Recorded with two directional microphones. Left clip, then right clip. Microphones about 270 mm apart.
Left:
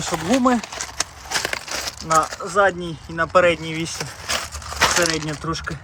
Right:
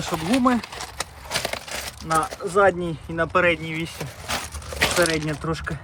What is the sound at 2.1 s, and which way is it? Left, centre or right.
Speech, centre.